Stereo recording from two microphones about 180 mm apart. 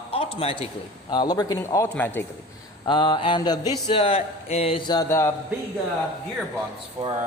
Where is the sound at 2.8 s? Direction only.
25° left (ahead or behind).